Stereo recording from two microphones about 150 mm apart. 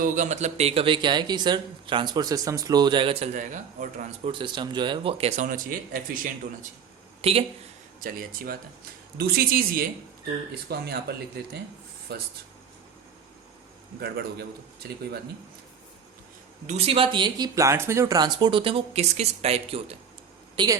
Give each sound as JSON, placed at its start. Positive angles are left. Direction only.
{"t": 0.0, "sound": "speech", "side_deg": -55}
{"t": 3.3, "sound": "speech", "side_deg": -55}
{"t": 4.3, "sound": "speech", "side_deg": -30}
{"t": 5.5, "sound": "speech", "side_deg": -65}
{"t": 7.2, "sound": "speech", "side_deg": -40}
{"t": 8.0, "sound": "speech", "side_deg": -75}
{"t": 9.1, "sound": "speech", "side_deg": -90}
{"t": 10.7, "sound": "speech", "side_deg": -90}
{"t": 14.0, "sound": "speech", "side_deg": -90}
{"t": 16.6, "sound": "speech", "side_deg": -40}
{"t": 20.6, "sound": "speech", "side_deg": -30}